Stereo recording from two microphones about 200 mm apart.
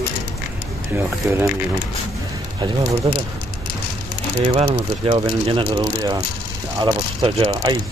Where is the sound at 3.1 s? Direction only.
25° right (ahead or behind).